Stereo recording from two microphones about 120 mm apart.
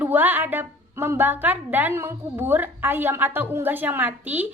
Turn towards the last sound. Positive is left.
turn(degrees=-15)  # may be behind; listen again after turning